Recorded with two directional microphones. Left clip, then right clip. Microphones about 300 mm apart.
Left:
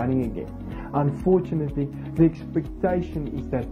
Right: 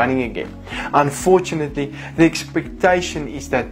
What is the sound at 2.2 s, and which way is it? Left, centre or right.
Speech, centre.